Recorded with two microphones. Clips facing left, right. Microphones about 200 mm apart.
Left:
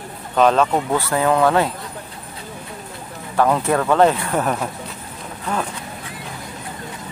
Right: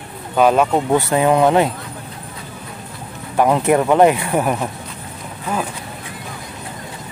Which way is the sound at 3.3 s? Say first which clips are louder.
Right 3 dB; 15° right (ahead or behind).